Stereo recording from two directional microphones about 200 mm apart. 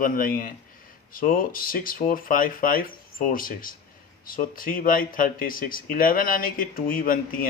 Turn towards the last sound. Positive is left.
turn(degrees=45)  # may be behind; listen again after turning